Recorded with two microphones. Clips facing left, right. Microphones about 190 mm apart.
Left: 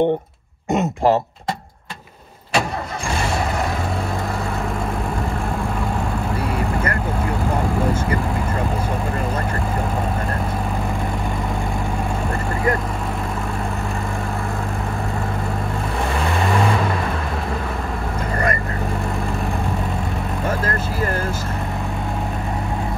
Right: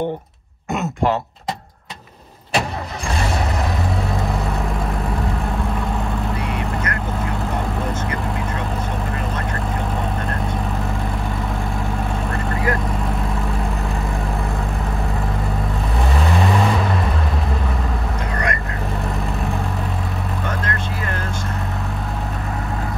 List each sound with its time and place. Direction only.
0.7 s throat clearing: 35° left (ahead or behind)
16.3 s vehicle: centre (ahead or behind)